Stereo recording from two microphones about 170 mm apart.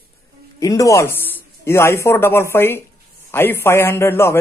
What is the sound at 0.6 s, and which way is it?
A man's voice, 20° left (ahead or behind).